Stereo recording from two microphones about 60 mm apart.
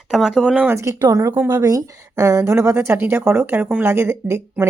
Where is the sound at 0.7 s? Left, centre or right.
Right.